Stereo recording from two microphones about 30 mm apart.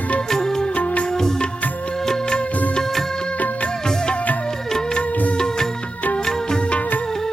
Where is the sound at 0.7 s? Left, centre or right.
Left.